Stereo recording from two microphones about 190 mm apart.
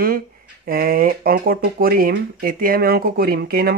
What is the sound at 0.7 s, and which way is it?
Speech, 50° right (ahead or behind).